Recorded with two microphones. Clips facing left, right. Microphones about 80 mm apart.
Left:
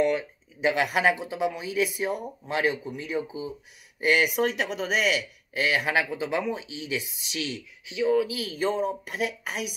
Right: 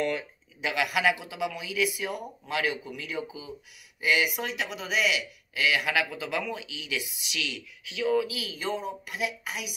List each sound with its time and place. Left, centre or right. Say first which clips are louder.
0.0 s speech: left 5 dB; centre
0.6 s a man's voice: left 4 dB; left
4.0 s speech: left 4 dB; left
7.8 s speech: left 3 dB; left